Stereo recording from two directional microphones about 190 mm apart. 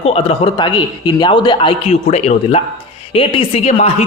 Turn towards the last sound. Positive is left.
turn(degrees=35)  # may be behind; listen again after turning